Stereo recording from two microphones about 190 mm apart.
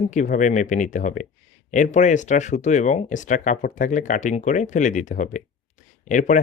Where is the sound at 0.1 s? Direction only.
40° left (ahead or behind).